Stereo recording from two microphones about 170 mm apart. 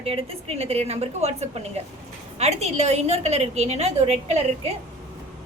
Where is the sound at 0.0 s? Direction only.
35° right (ahead or behind).